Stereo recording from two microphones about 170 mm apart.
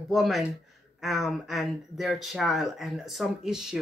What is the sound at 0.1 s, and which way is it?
Speech, centre (ahead or behind).